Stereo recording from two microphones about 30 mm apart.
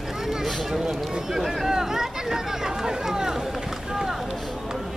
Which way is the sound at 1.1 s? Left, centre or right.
Centre.